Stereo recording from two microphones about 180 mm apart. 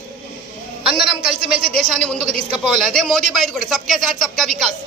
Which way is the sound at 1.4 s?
30° right (ahead or behind).